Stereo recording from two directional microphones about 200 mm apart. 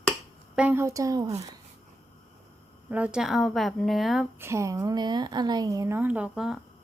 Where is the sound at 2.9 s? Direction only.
5° right (ahead or behind).